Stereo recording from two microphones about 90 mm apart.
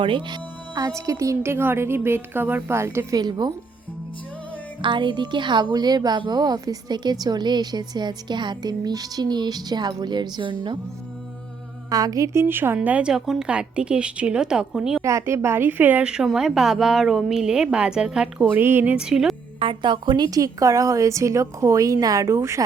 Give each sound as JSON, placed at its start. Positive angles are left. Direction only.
{"t": 0.0, "sound": "speech", "side_deg": -65}
{"t": 0.8, "sound": "a woman's voice", "side_deg": -40}
{"t": 3.2, "sound": "a woman's voice", "side_deg": -50}
{"t": 4.8, "sound": "speech", "side_deg": -60}
{"t": 5.7, "sound": "a woman's voice", "side_deg": -50}
{"t": 11.9, "sound": "a woman's voice", "side_deg": -45}
{"t": 15.0, "sound": "a woman's voice", "side_deg": -35}
{"t": 16.0, "sound": "a woman's voice", "side_deg": -5}
{"t": 18.9, "sound": "music", "side_deg": -10}
{"t": 19.5, "sound": "a woman's voice", "side_deg": -65}